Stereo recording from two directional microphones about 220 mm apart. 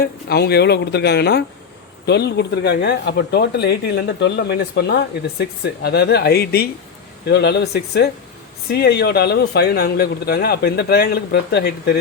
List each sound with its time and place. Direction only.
0.0 s speech: 45° left (ahead or behind)